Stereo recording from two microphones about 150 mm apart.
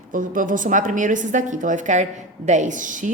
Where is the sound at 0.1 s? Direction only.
60° right (ahead or behind).